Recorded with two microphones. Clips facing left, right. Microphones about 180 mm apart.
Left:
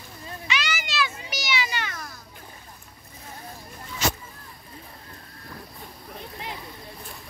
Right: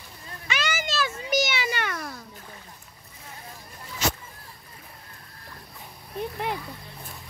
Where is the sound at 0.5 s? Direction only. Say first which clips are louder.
Right 2 dB; 50° right (ahead or behind).